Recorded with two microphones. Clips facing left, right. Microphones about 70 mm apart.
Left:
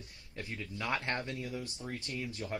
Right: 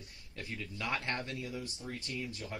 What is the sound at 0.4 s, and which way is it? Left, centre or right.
Speech, left.